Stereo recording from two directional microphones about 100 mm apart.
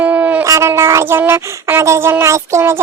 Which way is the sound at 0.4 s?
30° right (ahead or behind).